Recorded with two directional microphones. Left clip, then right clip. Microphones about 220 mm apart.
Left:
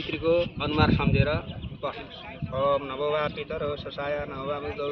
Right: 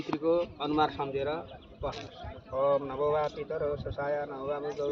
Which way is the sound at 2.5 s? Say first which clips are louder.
Left 2 dB; 5° left (ahead or behind).